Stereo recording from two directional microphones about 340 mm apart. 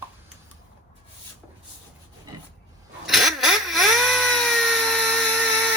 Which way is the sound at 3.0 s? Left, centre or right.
Centre.